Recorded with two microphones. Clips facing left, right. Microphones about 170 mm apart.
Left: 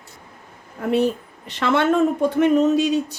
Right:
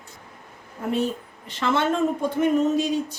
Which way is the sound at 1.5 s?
70° left (ahead or behind).